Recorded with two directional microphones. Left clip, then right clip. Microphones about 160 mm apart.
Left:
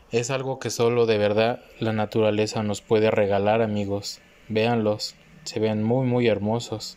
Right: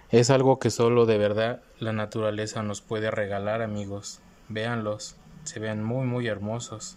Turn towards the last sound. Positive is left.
turn(degrees=5)  # may be behind; listen again after turning